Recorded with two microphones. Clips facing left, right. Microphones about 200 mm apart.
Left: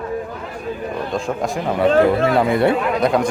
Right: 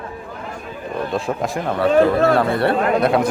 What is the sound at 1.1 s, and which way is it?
Speech, centre (ahead or behind).